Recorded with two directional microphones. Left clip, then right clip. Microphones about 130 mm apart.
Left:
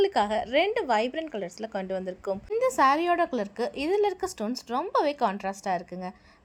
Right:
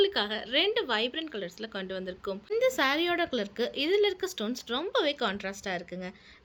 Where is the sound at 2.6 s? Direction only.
25° left (ahead or behind).